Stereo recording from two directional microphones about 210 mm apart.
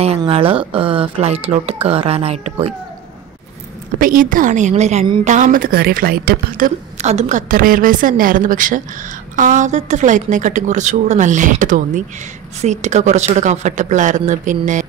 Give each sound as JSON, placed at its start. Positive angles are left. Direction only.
{"t": 0.0, "sound": "speech", "side_deg": -30}
{"t": 4.0, "sound": "a woman's voice", "side_deg": -40}
{"t": 5.3, "sound": "a woman's voice", "side_deg": -40}